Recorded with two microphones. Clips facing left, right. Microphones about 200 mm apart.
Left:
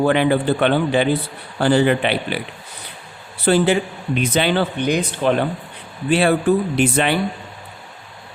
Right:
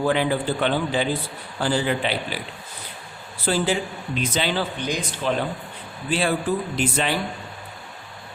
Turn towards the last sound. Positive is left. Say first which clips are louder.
# left 6 dB
turn(degrees=65)  # may be behind; listen again after turning